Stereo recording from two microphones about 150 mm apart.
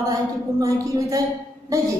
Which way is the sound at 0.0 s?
20° right (ahead or behind).